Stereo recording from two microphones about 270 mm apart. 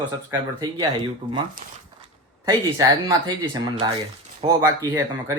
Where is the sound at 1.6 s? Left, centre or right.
Right.